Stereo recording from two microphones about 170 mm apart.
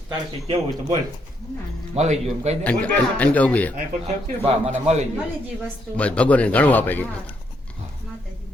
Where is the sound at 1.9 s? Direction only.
40° right (ahead or behind).